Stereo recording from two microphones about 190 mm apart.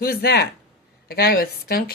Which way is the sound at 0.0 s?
55° left (ahead or behind).